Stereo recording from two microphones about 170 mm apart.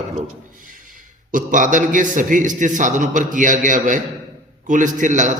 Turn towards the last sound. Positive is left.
turn(degrees=-45)  # may be behind; listen again after turning